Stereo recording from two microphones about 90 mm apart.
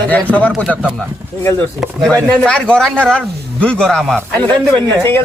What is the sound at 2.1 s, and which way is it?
Speech, 10° left (ahead or behind).